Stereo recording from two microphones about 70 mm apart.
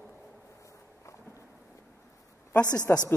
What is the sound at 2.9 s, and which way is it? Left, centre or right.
Speech, left.